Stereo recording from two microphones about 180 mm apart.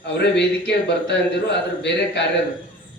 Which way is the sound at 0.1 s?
70° left (ahead or behind).